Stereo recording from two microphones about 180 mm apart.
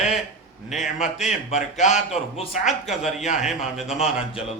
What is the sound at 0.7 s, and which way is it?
A man's voice, 40° left (ahead or behind).